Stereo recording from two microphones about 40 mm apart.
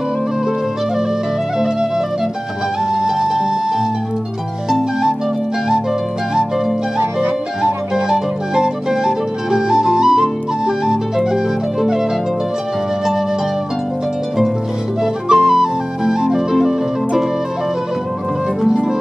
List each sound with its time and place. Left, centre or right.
1.6 s music: centre
4.6 s music: centre
7.6 s music: centre
15.2 s flute: centre